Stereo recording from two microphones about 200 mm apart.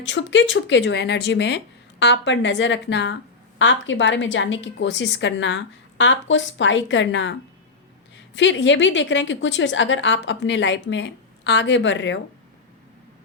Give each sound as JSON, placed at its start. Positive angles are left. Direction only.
{"t": 0.0, "sound": "a woman's voice", "side_deg": 65}
{"t": 8.4, "sound": "a woman's voice", "side_deg": 65}